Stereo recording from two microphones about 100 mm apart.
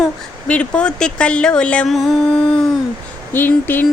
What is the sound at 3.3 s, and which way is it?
Speech, 20° left (ahead or behind).